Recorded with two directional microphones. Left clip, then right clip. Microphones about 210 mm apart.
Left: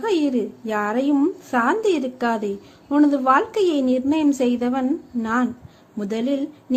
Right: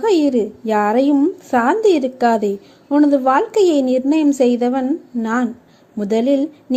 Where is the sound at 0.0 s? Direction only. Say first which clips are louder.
Right 6 dB; 15° right (ahead or behind).